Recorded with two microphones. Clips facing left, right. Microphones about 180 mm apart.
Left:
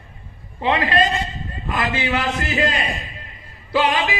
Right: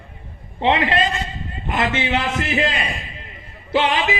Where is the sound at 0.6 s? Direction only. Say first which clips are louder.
Right 1 dB; 25° right (ahead or behind).